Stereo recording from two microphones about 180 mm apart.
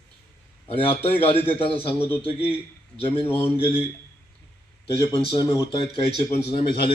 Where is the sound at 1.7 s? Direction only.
10° left (ahead or behind).